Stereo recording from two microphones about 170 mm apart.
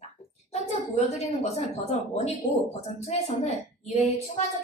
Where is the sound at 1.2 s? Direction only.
40° left (ahead or behind).